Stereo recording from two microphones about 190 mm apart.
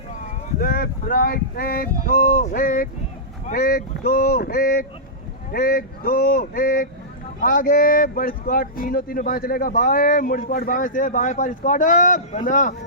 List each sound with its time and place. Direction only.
0.6 s speech: 50° left (ahead or behind)